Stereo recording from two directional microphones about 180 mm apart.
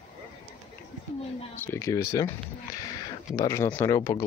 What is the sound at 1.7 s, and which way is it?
Speech, 15° left (ahead or behind).